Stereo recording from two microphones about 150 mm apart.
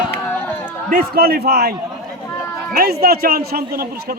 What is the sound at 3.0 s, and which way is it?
A man's voice, 90° right.